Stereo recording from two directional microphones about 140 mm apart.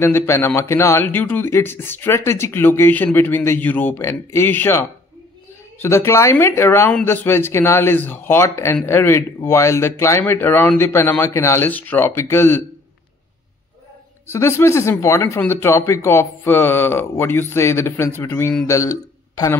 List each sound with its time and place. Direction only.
0.0 s a man's voice: 15° left (ahead or behind)
14.2 s a man's voice: 20° left (ahead or behind)